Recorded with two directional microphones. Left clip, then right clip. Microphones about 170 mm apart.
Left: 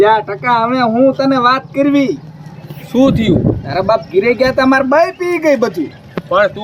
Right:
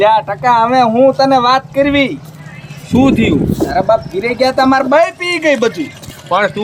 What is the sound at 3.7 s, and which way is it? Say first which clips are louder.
Speech: right 1 dB; 30° left (ahead or behind).